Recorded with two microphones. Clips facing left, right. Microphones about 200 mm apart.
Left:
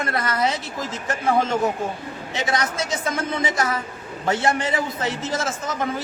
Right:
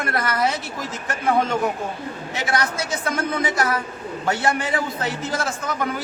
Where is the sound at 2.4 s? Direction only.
20° left (ahead or behind).